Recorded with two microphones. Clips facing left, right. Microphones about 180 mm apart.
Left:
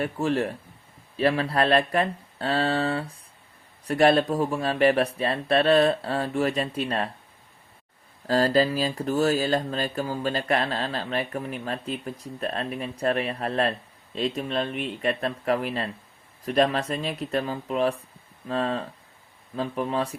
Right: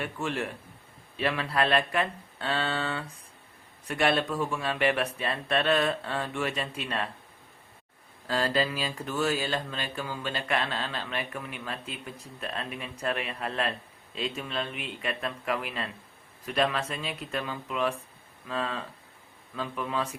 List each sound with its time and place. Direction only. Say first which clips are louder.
0.0 s speech: left 7 dB; 35° left (ahead or behind)
8.3 s speech: left 7 dB; 40° left (ahead or behind)